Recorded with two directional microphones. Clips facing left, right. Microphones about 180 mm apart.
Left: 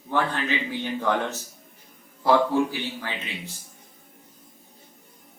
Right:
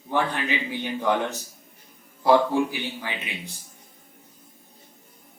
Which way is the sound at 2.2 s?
15° right (ahead or behind).